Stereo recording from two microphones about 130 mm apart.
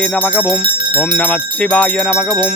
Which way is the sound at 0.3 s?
5° left (ahead or behind).